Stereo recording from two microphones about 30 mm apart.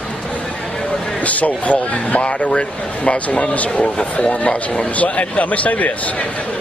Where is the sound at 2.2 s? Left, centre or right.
Left.